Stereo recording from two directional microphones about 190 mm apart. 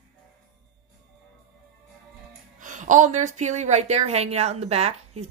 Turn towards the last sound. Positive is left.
turn(degrees=-35)  # may be behind; listen again after turning